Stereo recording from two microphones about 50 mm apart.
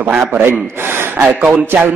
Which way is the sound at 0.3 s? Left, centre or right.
Right.